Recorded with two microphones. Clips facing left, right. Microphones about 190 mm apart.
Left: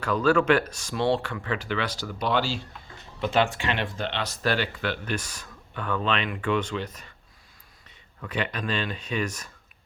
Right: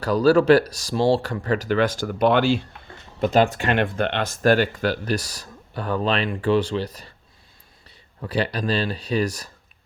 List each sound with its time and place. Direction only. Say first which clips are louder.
0.0 s speech: right 5 dB; 35° right (ahead or behind); by 2.6 s 55° right (ahead or behind)
3.2 s speech: right 5 dB; 40° right (ahead or behind)